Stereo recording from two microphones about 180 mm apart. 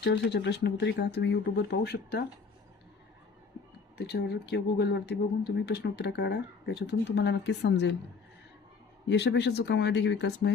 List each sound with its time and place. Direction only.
0.0 s speech: 70° left (ahead or behind)
3.9 s speech: 65° left (ahead or behind)
9.0 s speech: 75° left (ahead or behind)